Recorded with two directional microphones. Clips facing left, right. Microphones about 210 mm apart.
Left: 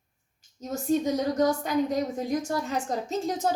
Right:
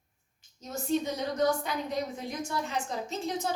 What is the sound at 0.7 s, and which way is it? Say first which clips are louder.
A woman's voice: left 5 dB; 40° left (ahead or behind).